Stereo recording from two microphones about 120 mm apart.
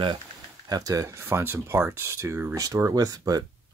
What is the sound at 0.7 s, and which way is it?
Speech, 30° right (ahead or behind).